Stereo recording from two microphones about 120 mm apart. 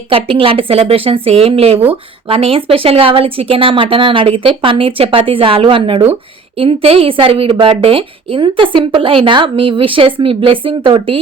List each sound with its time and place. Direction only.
0.1 s a woman's voice: 45° right (ahead or behind)